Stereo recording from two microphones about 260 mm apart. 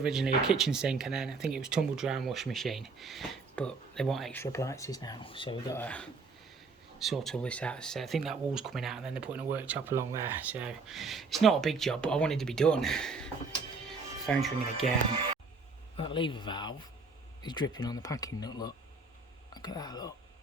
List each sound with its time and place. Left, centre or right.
0.0 s speech: centre
13.8 s music: centre
16.0 s speech: centre